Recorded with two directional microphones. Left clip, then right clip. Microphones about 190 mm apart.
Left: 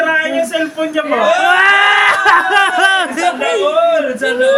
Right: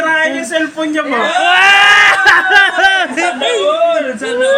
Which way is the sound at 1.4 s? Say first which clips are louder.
Right 4 dB; 10° left (ahead or behind).